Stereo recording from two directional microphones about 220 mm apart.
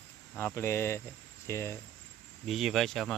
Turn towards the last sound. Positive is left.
turn(degrees=0)  # may be behind; listen again after turning